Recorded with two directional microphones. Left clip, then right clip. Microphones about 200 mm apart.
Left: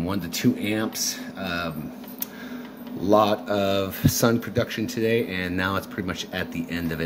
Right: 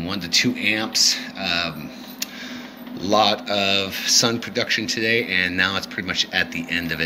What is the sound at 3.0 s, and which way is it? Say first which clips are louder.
Speech: right 1 dB; 45° left (ahead or behind).